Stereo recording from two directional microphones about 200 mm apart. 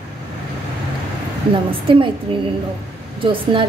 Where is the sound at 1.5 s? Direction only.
25° right (ahead or behind).